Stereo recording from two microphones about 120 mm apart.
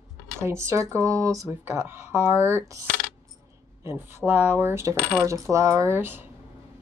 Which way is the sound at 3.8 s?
20° right (ahead or behind).